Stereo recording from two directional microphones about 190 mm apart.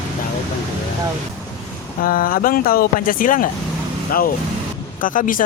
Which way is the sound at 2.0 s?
50° left (ahead or behind).